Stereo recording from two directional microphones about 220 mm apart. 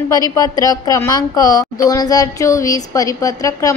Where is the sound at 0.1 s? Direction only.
15° left (ahead or behind).